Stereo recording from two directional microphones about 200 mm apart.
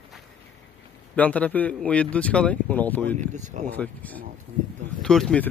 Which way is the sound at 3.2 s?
35° right (ahead or behind).